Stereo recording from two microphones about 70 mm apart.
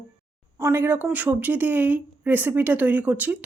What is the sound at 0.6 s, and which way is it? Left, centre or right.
Speech, right.